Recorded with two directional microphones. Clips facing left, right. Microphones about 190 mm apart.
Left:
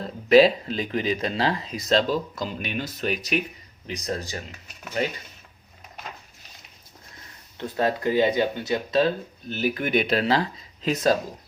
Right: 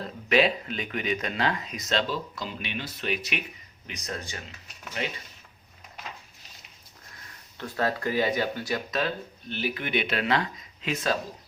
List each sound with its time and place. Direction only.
0.3 s speech: 35° left (ahead or behind)
7.6 s speech: 20° left (ahead or behind); by 11.2 s 40° left (ahead or behind)